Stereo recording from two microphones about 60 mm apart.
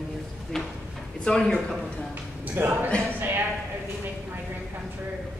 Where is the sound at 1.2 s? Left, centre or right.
Centre.